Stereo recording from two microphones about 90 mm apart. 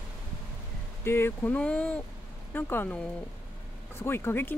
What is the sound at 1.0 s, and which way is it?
Speech, 25° left (ahead or behind).